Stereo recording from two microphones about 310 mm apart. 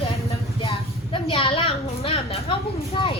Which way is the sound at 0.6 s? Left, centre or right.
Centre.